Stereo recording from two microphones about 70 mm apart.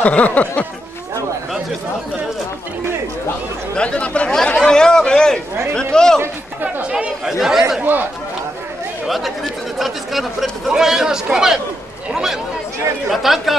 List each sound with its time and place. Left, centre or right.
0.0 s a sound: left
3.7 s speech: centre
6.6 s a sound: centre
7.3 s speech: centre
7.8 s a man's voice: right
9.0 s speech: centre